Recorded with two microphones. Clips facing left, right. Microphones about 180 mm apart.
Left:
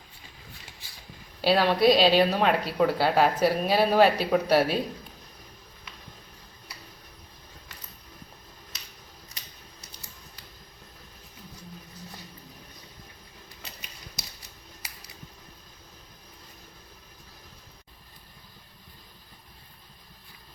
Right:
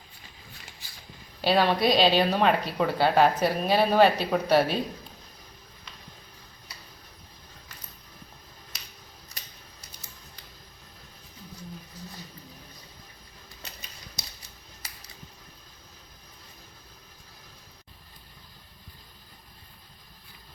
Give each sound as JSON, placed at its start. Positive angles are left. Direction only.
{"t": 1.4, "sound": "speech", "side_deg": 5}